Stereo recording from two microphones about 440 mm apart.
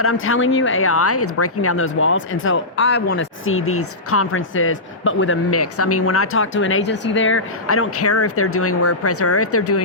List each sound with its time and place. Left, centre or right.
0.0 s speech: left